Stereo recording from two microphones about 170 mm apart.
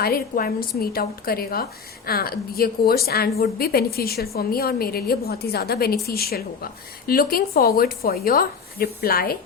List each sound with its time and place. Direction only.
0.0 s a woman's voice: 60° left (ahead or behind)